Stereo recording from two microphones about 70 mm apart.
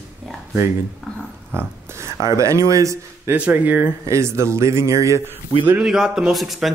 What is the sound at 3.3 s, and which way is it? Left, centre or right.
Speech, right.